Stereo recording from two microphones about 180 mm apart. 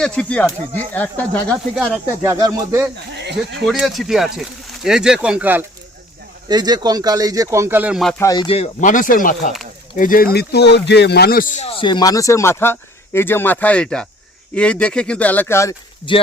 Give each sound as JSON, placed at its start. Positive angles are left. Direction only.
{"t": 0.0, "sound": "speech", "side_deg": 5}
{"t": 2.2, "sound": "speech", "side_deg": -20}
{"t": 3.7, "sound": "speech", "side_deg": 0}
{"t": 6.5, "sound": "speech", "side_deg": -20}
{"t": 8.2, "sound": "speech", "side_deg": 20}
{"t": 8.4, "sound": "speech", "side_deg": 35}
{"t": 10.3, "sound": "speech", "side_deg": 65}
{"t": 16.1, "sound": "speech", "side_deg": 25}